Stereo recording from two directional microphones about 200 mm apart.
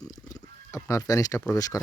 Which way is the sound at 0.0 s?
20° left (ahead or behind).